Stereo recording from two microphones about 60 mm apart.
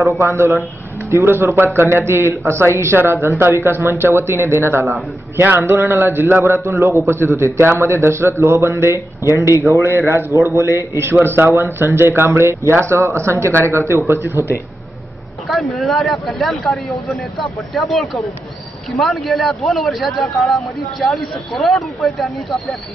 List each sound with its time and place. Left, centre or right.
0.2 s a man's voice: right
9.3 s speech: left
9.9 s a man's voice: right
15.4 s speech: centre